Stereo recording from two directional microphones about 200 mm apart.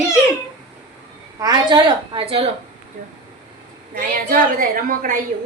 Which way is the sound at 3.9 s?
45° right (ahead or behind).